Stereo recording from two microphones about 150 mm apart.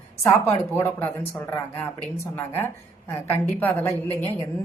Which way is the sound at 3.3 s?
15° left (ahead or behind).